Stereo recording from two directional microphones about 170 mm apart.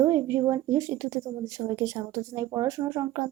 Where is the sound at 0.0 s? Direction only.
20° right (ahead or behind).